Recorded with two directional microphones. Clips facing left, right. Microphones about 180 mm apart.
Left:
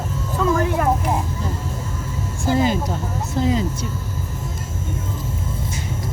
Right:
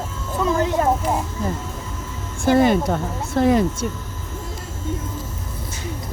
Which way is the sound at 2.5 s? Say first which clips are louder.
Right 4 dB; 60° right (ahead or behind).